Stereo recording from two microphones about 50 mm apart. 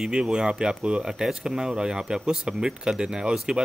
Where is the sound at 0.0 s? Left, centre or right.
Centre.